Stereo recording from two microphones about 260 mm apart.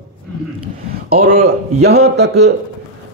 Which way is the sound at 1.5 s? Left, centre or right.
Right.